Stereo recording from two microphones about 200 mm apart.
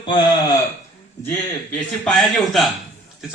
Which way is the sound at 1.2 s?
10° left (ahead or behind).